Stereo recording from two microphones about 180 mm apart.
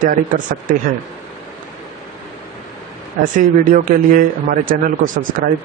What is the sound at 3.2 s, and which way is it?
Speech, 45° right (ahead or behind).